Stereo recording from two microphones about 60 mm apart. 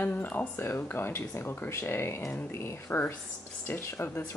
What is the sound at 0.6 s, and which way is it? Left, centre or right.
Speech, left.